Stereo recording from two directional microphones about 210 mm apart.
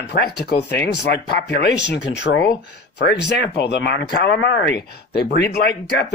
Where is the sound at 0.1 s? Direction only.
50° left (ahead or behind).